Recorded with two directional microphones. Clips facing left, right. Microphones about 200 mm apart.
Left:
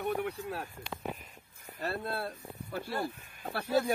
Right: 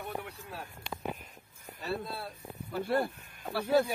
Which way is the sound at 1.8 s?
55° left (ahead or behind).